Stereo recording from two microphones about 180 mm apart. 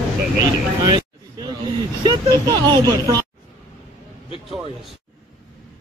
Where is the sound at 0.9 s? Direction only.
20° right (ahead or behind).